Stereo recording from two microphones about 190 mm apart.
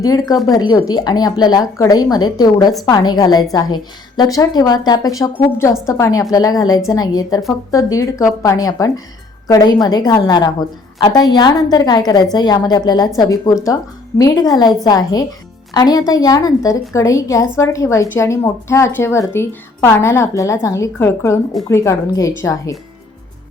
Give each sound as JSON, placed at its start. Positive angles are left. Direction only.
{"t": 0.0, "sound": "a woman's voice", "side_deg": 20}